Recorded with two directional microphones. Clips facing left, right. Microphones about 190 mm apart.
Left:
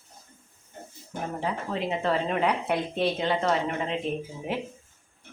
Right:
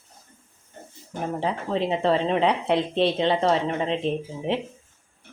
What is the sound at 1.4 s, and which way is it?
A woman's voice, 30° right (ahead or behind).